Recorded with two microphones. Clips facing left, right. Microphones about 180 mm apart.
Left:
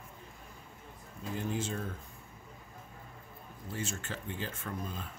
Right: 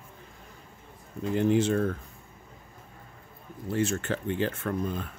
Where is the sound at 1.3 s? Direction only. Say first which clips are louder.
Right 12 dB; 75° right (ahead or behind).